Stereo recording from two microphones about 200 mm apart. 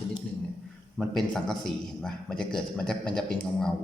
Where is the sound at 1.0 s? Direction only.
Centre (ahead or behind).